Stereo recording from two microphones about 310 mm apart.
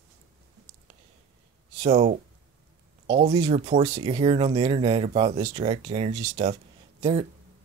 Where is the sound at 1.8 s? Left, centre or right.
Right.